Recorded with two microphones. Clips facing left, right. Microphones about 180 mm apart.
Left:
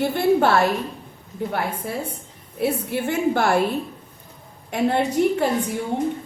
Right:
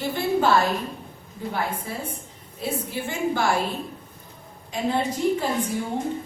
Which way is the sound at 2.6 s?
65° left (ahead or behind).